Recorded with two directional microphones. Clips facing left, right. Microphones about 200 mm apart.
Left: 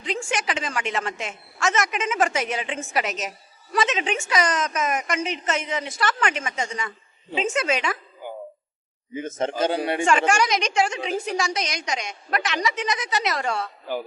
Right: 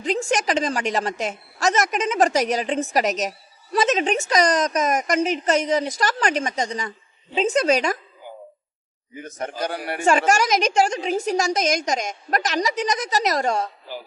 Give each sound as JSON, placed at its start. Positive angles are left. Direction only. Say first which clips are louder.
{"t": 0.0, "sound": "a woman's voice", "louder": "right 5 dB", "side_deg": -40}
{"t": 9.1, "sound": "a man's voice", "louder": "left 5 dB", "side_deg": 20}
{"t": 10.1, "sound": "a woman's voice", "louder": "right 4 dB", "side_deg": -40}